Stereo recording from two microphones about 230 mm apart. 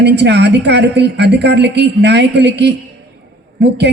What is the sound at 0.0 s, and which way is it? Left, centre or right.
A man's voice, right.